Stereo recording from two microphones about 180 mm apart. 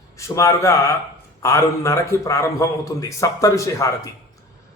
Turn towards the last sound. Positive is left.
turn(degrees=15)  # may be behind; listen again after turning